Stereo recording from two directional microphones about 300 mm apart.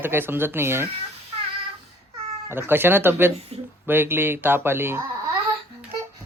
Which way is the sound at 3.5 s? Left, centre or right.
Centre.